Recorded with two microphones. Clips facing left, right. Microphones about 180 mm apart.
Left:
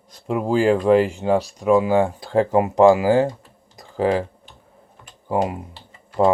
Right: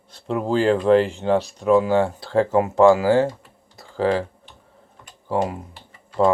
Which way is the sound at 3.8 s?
15° left (ahead or behind).